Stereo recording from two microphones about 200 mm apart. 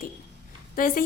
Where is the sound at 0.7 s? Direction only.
45° left (ahead or behind).